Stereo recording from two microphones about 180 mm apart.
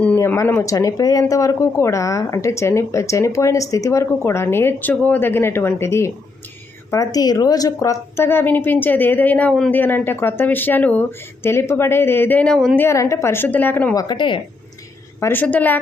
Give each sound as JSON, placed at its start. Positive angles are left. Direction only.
{"t": 0.0, "sound": "speech", "side_deg": 10}
{"t": 12.7, "sound": "speech", "side_deg": 15}
{"t": 13.9, "sound": "speech", "side_deg": 20}
{"t": 15.2, "sound": "speech", "side_deg": 10}